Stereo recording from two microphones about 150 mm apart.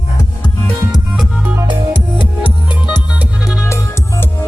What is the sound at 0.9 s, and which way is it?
Music, 5° right (ahead or behind).